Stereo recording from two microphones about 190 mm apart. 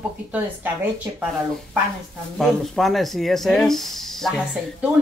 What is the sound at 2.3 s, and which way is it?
Speech, centre (ahead or behind).